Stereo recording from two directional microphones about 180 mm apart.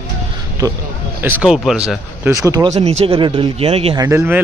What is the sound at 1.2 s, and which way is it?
Speech, 5° right (ahead or behind).